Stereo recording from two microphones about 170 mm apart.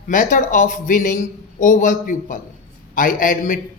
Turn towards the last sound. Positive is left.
turn(degrees=50)  # may be behind; listen again after turning